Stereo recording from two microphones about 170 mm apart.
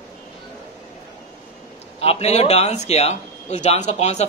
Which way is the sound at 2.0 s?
35° left (ahead or behind).